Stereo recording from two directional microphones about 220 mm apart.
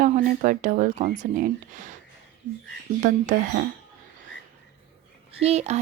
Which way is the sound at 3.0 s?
35° right (ahead or behind).